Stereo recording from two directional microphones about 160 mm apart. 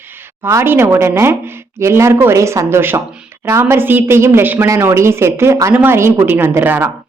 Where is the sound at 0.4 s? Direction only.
15° right (ahead or behind).